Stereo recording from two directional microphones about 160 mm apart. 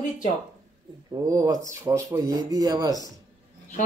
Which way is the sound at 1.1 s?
20° right (ahead or behind).